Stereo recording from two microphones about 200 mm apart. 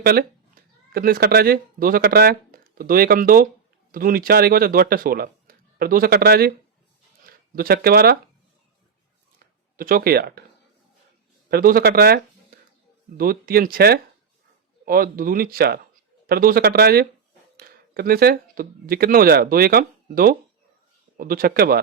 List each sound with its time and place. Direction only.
0.0 s speech: 50° right (ahead or behind)
9.7 s speech: 45° right (ahead or behind)
11.4 s speech: 45° right (ahead or behind)